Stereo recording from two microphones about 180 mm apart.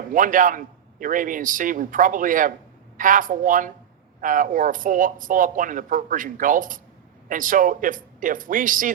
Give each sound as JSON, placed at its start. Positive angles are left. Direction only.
{"t": 0.1, "sound": "speech", "side_deg": -50}